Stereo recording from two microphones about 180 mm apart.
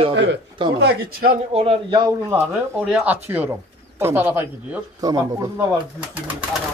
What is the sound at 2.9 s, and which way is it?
Speech, 10° right (ahead or behind).